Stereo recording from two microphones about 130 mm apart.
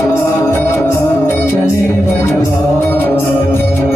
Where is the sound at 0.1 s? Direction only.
20° left (ahead or behind).